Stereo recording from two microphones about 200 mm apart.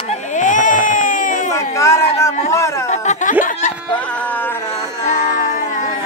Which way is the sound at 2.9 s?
35° left (ahead or behind).